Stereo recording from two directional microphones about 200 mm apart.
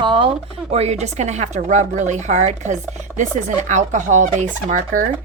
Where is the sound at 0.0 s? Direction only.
25° right (ahead or behind).